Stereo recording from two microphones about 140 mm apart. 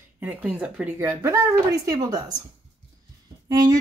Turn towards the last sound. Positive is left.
turn(degrees=-25)  # may be behind; listen again after turning